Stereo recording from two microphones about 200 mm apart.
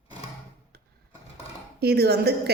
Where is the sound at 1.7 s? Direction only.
50° right (ahead or behind).